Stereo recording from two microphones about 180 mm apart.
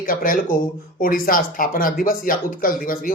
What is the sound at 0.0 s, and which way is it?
Speech, 50° left (ahead or behind).